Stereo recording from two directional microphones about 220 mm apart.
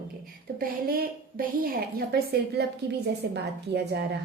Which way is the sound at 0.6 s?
40° right (ahead or behind).